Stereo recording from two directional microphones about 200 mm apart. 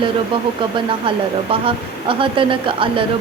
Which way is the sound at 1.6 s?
25° right (ahead or behind).